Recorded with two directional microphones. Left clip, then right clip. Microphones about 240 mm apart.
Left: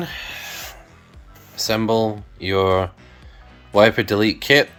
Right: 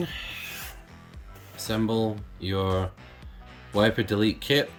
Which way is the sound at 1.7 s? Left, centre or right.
Left.